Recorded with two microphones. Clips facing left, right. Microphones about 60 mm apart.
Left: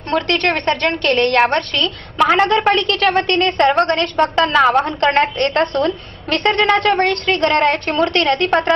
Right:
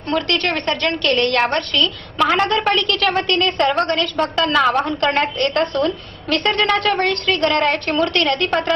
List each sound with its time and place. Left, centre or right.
0.5 s a woman's voice: left
2.6 s a woman's voice: centre
5.7 s a woman's voice: left
6.5 s a woman's voice: centre
7.7 s a woman's voice: centre
8.0 s a woman's voice: left